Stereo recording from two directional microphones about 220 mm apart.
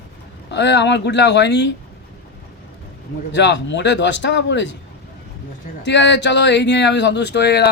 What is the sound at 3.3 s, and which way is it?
Speech, 55° left (ahead or behind).